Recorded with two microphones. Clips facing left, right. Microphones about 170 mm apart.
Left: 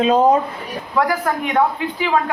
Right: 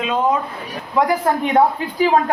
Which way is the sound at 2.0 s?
40° right (ahead or behind).